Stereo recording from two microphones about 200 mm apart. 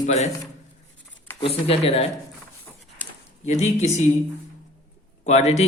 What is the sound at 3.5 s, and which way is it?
Speech, 35° left (ahead or behind).